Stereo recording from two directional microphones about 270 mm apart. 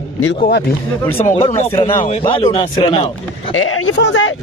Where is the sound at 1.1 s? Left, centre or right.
Left.